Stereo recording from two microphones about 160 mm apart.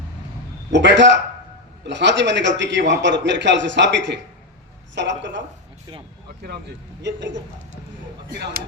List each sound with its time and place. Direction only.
0.7 s a man's voice: 90° right
7.0 s a man's voice: 90° right